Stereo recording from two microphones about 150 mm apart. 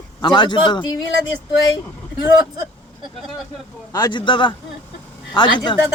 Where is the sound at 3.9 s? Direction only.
30° left (ahead or behind).